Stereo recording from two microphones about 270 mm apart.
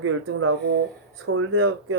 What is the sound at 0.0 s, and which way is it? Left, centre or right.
Speech, right.